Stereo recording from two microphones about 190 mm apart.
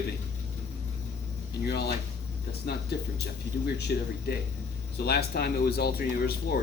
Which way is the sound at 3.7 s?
60° left (ahead or behind).